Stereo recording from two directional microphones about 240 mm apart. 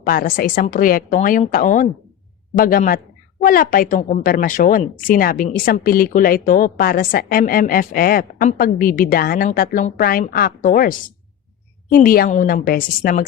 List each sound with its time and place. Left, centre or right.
0.0 s speech: left